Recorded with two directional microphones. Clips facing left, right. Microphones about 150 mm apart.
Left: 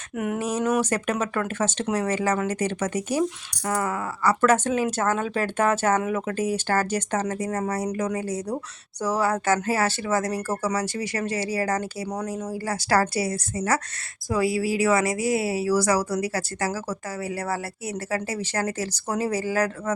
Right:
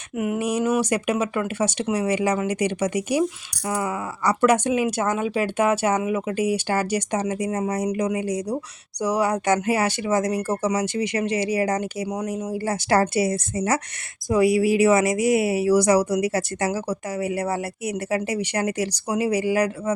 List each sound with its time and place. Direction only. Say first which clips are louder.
0.2 s speech: right 2 dB; 10° right (ahead or behind)